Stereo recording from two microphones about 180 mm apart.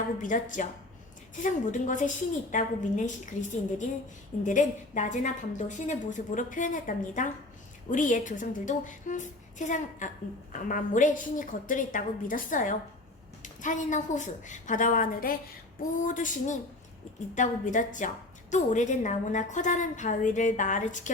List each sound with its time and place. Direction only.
0.2 s a woman's voice: 45° left (ahead or behind)